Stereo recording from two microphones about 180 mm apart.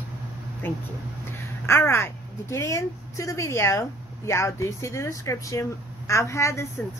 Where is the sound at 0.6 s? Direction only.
10° left (ahead or behind).